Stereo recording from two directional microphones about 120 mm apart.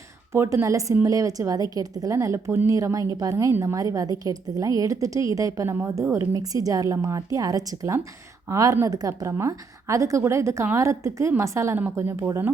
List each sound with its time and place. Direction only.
0.3 s speech: 25° right (ahead or behind)